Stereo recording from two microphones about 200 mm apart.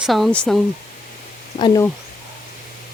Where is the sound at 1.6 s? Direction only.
20° left (ahead or behind).